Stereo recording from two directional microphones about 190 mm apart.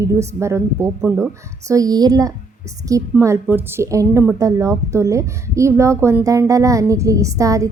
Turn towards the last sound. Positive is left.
turn(degrees=-15)  # may be behind; listen again after turning